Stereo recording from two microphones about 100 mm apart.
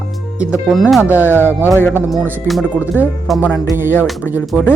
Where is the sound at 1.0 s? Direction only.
20° right (ahead or behind).